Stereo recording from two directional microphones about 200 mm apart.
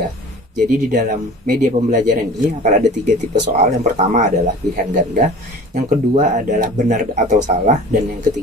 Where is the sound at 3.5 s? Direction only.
35° right (ahead or behind).